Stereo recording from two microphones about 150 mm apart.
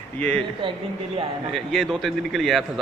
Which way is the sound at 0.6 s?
35° right (ahead or behind).